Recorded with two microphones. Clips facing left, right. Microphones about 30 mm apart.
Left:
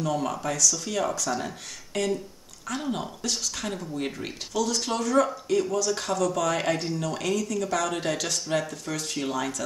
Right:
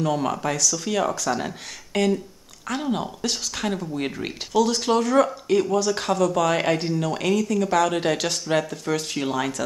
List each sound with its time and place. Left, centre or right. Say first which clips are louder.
0.0 s speech: right 4 dB; right
2.8 s speech: right 5 dB; centre
4.6 s speech: right 6 dB; right
4.8 s speech: right 5 dB; right